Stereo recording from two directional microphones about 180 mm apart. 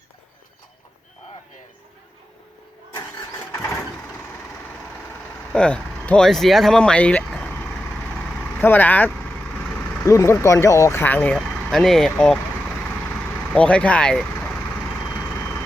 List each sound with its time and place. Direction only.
2.9 s vehicle: 15° left (ahead or behind)
5.5 s speech: 5° left (ahead or behind)
13.5 s speech: 5° left (ahead or behind)